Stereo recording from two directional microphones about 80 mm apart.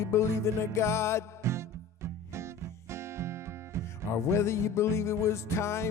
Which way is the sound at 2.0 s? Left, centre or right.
Right.